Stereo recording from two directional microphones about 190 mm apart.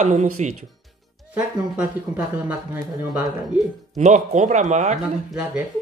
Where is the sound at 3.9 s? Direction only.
40° right (ahead or behind).